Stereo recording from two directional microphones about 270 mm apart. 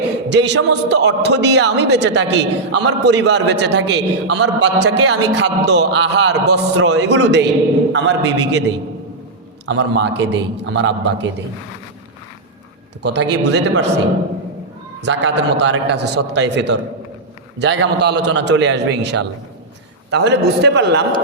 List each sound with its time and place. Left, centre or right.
0.3 s a man's voice: right
9.6 s a man's voice: right
13.0 s a man's voice: right
15.0 s a man's voice: right